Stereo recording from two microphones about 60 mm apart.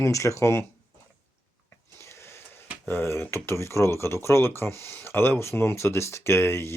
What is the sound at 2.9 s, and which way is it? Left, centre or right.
Speech, left.